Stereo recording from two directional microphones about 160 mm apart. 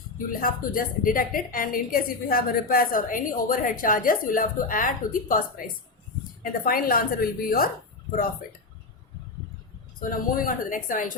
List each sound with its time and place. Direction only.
0.3 s a woman's voice: 60° left (ahead or behind)
6.4 s a woman's voice: 65° left (ahead or behind)
10.0 s a woman's voice: 60° left (ahead or behind)